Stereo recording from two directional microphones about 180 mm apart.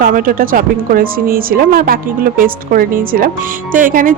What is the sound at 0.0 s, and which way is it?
Speech, 50° right (ahead or behind).